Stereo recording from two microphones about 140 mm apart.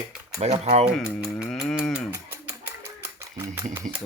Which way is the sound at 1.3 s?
5° right (ahead or behind).